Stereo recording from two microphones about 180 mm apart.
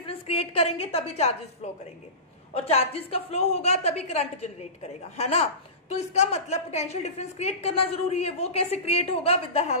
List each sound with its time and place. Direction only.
0.0 s a woman's voice: 30° left (ahead or behind)